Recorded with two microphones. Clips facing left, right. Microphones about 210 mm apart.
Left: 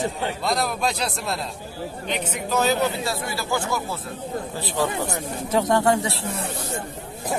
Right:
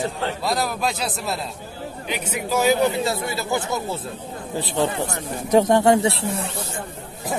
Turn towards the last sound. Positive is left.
turn(degrees=-20)  # may be behind; listen again after turning